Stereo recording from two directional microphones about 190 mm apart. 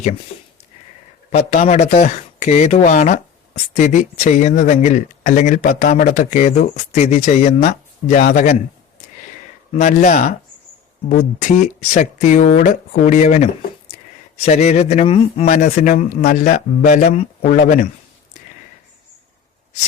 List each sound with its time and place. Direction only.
1.3 s speech: 35° left (ahead or behind)
9.7 s speech: 40° left (ahead or behind)
15.4 s speech: 40° left (ahead or behind)